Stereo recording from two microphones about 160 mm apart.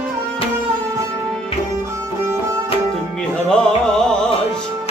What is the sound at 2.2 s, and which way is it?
Music, 15° right (ahead or behind).